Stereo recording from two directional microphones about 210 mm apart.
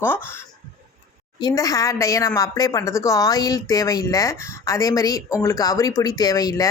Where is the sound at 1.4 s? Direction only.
20° left (ahead or behind).